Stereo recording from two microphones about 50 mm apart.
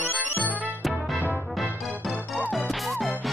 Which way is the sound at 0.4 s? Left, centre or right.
Left.